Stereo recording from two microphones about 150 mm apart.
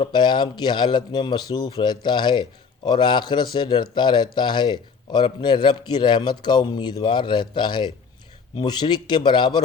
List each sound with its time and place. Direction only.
0.0 s speech: 30° left (ahead or behind)